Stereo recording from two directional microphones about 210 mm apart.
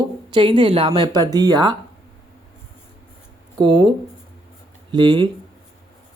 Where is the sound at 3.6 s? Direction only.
20° right (ahead or behind).